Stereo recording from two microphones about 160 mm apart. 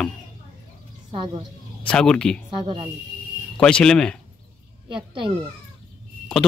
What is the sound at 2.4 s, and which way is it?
Speech, 30° right (ahead or behind).